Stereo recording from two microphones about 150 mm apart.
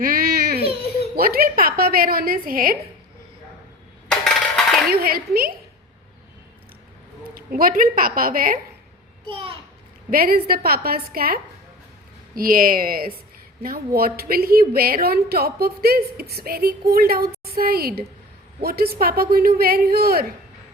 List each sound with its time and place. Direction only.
0.0 s baby cry: 75° right (ahead or behind)
1.1 s a woman's voice: 85° right; by 2.7 s 70° right (ahead or behind)
4.1 s a sound: centre (ahead or behind)
4.9 s a woman's voice: 80° right
7.3 s a woman's voice: 70° right (ahead or behind)
9.3 s a child's voice: 35° right (ahead or behind)
10.1 s a woman's voice: 75° right (ahead or behind)
16.9 s a woman's voice: 90° right